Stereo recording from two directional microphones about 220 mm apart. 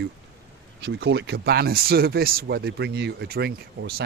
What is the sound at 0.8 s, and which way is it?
Speech, 50° right (ahead or behind).